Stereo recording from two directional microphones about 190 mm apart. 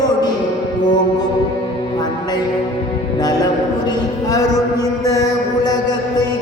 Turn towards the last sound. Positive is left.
turn(degrees=20)  # may be behind; listen again after turning